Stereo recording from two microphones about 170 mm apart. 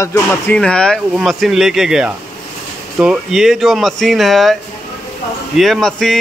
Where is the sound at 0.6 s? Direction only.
5° left (ahead or behind).